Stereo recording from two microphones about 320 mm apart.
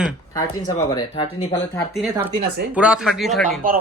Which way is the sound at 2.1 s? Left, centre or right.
Centre.